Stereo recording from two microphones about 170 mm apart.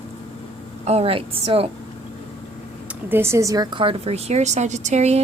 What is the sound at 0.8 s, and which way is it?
Speech, 35° right (ahead or behind).